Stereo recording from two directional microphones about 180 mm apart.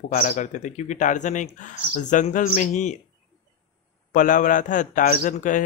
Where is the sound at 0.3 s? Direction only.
40° left (ahead or behind).